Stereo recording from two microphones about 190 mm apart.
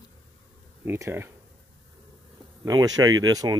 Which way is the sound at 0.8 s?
10° right (ahead or behind).